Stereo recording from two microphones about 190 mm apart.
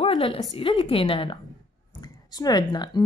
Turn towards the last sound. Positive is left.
turn(degrees=20)  # may be behind; listen again after turning